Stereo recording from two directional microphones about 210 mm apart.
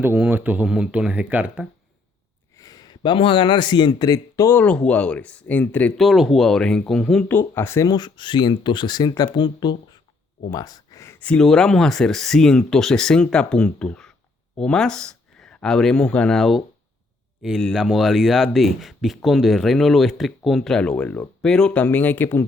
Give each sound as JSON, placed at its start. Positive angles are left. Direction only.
{"t": 0.0, "sound": "speech", "side_deg": -10}
{"t": 2.6, "sound": "speech", "side_deg": 20}